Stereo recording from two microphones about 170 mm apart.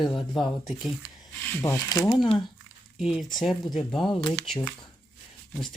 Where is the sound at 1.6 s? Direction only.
15° left (ahead or behind).